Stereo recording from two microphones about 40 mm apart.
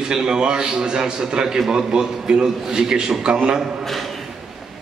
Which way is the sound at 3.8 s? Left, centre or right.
Centre.